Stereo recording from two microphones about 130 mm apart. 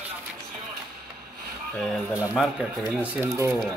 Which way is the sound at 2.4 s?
5° right (ahead or behind).